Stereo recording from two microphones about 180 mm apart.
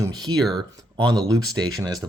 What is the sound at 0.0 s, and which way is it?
Speech, 20° right (ahead or behind).